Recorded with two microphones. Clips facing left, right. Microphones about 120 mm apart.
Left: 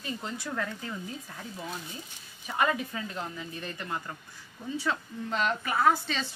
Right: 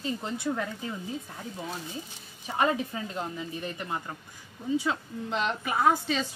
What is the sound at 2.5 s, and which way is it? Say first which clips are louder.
Speech: right 2 dB; 30° right (ahead or behind).